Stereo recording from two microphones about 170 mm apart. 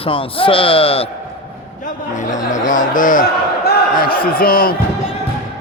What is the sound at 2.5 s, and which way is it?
A man's voice, 50° left (ahead or behind).